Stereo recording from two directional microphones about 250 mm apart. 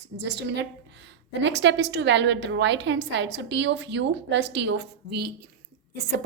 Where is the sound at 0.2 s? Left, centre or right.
Right.